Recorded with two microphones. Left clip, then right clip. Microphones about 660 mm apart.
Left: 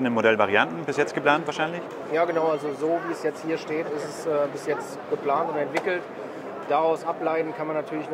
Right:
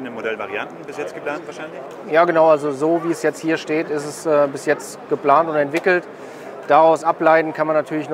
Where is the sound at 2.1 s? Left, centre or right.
Right.